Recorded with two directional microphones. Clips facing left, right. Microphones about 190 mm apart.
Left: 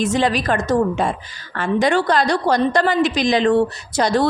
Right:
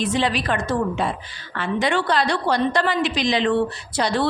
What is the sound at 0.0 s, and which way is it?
A woman's voice, 45° left (ahead or behind).